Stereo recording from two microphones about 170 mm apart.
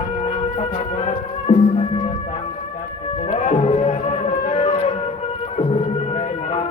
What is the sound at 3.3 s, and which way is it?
Music, 45° left (ahead or behind).